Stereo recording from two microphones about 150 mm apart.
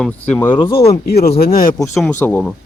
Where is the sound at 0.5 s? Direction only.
30° left (ahead or behind).